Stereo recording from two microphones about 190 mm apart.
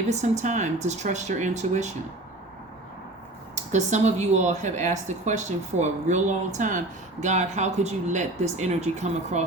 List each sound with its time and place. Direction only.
0.1 s speech: 40° right (ahead or behind)
3.5 s speech: 40° right (ahead or behind)